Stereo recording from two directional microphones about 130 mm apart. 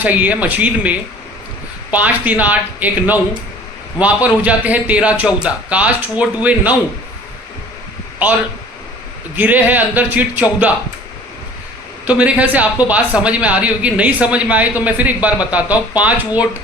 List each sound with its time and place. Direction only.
0.0 s speech: 10° right (ahead or behind)
9.3 s speech: 15° right (ahead or behind)
12.0 s speech: 10° right (ahead or behind)